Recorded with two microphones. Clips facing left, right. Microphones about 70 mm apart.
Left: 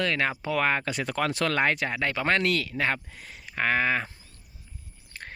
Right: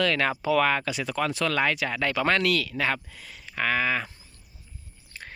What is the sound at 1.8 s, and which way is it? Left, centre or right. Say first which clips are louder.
Speech: right 1 dB; left.